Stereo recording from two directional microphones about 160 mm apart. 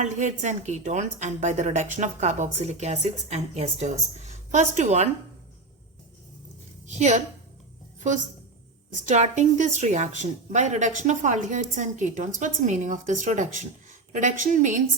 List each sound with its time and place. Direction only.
0.0 s a woman's voice: 50° right (ahead or behind)
6.8 s a woman's voice: 45° right (ahead or behind)
8.9 s a woman's voice: 50° right (ahead or behind)